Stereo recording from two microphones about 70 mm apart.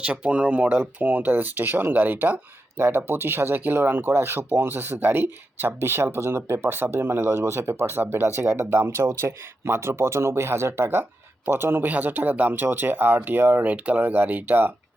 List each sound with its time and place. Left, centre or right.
0.0 s speech: centre